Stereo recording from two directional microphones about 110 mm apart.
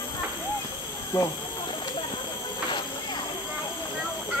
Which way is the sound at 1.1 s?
25° left (ahead or behind).